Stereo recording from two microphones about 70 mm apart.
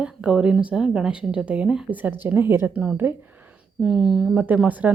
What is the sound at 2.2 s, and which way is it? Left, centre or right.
Speech, right.